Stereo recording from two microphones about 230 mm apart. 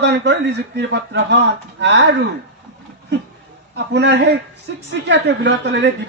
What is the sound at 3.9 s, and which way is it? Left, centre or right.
A man's voice, right.